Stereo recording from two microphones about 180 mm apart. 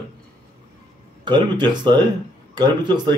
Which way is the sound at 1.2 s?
25° right (ahead or behind).